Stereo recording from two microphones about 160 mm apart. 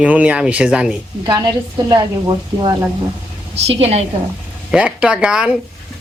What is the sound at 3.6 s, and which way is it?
Speech, 40° right (ahead or behind).